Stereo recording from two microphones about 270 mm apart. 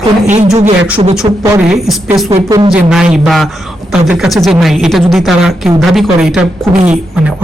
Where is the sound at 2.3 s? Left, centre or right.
Centre.